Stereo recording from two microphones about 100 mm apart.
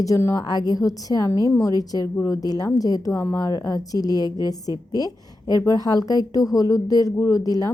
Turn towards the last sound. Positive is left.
turn(degrees=40)  # may be behind; listen again after turning